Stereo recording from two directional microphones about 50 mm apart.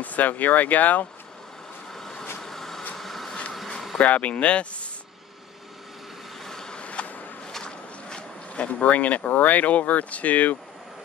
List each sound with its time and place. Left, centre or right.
0.0 s speech: left
2.0 s vehicle: centre
3.0 s a sound: centre
4.0 s speech: left
6.4 s vehicle: centre
6.8 s a sound: left
7.5 s speech: centre; by 10.6 s left